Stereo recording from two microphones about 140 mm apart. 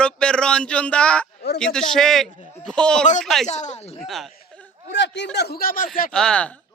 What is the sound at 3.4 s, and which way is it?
Speech, 55° left (ahead or behind).